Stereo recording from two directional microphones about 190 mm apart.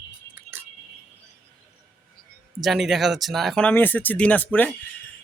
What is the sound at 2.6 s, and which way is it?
Speech, centre (ahead or behind).